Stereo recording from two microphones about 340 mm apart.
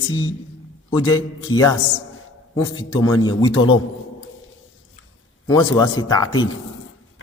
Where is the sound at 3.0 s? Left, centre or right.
Centre.